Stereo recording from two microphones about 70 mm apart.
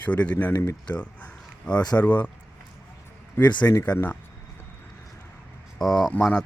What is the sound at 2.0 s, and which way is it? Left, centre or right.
Speech, left.